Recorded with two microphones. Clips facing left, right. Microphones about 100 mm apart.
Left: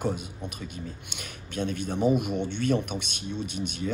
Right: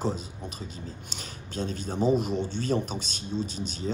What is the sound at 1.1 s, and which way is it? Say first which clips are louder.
Speech: left 1 dB; 35° right (ahead or behind).